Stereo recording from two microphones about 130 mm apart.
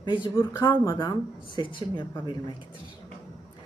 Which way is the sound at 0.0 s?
40° left (ahead or behind).